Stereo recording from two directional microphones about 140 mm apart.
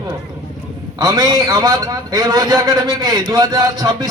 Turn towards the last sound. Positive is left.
turn(degrees=-30)  # may be behind; listen again after turning